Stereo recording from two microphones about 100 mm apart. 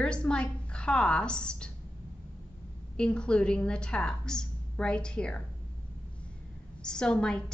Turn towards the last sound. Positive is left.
turn(degrees=10)  # may be behind; listen again after turning